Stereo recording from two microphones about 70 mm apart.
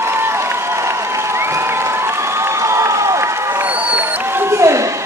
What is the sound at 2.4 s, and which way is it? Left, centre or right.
Crowd, right.